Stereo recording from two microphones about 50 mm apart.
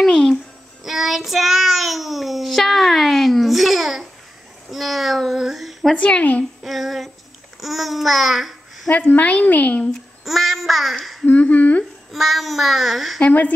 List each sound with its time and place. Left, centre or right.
0.0 s music: centre
0.8 s child singing: centre
5.9 s speech: left
6.6 s female singing: centre
7.6 s child singing: centre
8.9 s a woman's voice: left
10.2 s child singing: centre
11.2 s a woman's voice: left
12.1 s child singing: centre